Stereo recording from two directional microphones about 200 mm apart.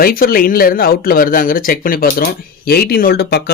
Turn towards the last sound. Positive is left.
turn(degrees=50)  # may be behind; listen again after turning